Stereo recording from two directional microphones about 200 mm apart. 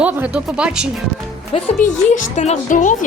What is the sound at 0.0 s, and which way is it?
Speech, 5° right (ahead or behind).